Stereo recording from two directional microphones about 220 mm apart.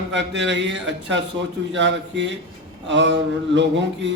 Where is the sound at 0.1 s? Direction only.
55° right (ahead or behind).